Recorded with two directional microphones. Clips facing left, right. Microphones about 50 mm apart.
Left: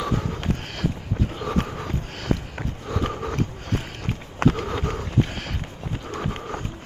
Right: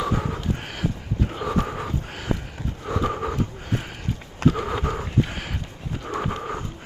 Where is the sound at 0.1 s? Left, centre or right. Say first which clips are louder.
Even; centre.